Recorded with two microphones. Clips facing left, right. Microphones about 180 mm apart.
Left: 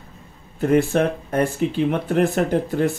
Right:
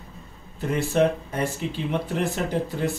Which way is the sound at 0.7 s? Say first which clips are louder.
Left 3 dB; 55° left (ahead or behind).